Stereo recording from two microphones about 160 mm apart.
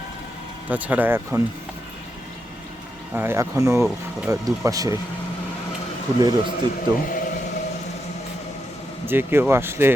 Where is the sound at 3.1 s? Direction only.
15° right (ahead or behind).